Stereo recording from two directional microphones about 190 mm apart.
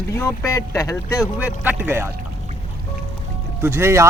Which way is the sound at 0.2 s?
15° left (ahead or behind).